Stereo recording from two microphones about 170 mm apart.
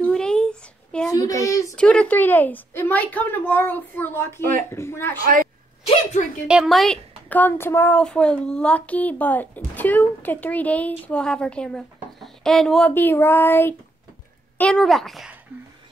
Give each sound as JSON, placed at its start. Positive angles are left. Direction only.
{"t": 0.0, "sound": "a sound", "side_deg": 5}
{"t": 1.1, "sound": "speech", "side_deg": 20}
{"t": 1.8, "sound": "a woman's voice", "side_deg": 5}
{"t": 4.4, "sound": "speech", "side_deg": -55}
{"t": 4.6, "sound": "a woman's voice", "side_deg": 15}
{"t": 6.4, "sound": "a woman's voice", "side_deg": -5}